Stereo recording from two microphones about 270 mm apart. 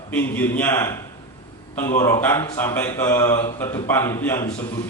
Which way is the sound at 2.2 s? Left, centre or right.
Centre.